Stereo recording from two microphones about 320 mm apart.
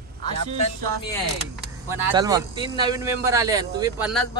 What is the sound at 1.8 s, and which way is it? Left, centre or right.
A man's voice, centre.